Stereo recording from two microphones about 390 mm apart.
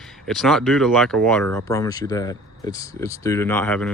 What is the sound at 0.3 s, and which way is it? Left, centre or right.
Speech, centre.